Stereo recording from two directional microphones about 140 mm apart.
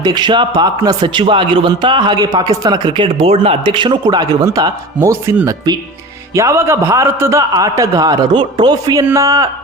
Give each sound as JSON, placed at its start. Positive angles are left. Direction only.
{"t": 0.0, "sound": "a man's voice", "side_deg": -30}
{"t": 3.2, "sound": "a man's voice", "side_deg": -45}